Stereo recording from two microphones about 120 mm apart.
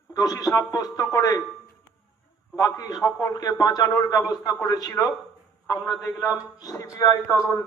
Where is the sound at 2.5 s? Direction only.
30° left (ahead or behind).